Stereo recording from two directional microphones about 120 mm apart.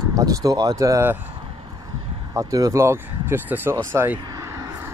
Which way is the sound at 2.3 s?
25° right (ahead or behind).